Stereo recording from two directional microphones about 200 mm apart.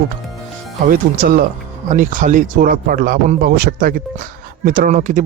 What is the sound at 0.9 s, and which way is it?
Speech, 45° right (ahead or behind).